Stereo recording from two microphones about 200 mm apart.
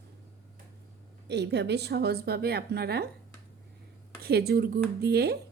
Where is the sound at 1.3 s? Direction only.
60° right (ahead or behind).